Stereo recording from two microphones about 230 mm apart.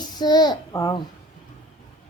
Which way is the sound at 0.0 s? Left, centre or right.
Centre.